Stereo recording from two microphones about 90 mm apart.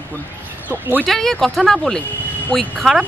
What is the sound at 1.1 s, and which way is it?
Speech, 5° left (ahead or behind).